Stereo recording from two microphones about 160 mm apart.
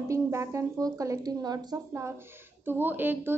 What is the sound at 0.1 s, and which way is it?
A woman's voice, 20° right (ahead or behind).